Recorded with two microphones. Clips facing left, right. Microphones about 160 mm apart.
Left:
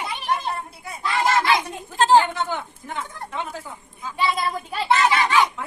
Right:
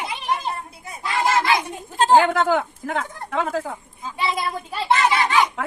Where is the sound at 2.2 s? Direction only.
90° right.